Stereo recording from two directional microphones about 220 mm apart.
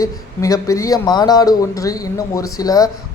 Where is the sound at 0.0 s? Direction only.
15° left (ahead or behind).